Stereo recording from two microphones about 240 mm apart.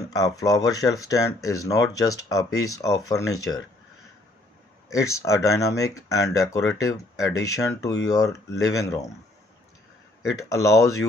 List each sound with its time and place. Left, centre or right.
0.1 s speech: centre
4.8 s speech: centre
10.5 s speech: centre